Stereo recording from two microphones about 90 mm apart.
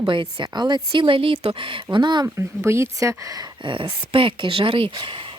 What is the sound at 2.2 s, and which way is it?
Speech, 30° right (ahead or behind).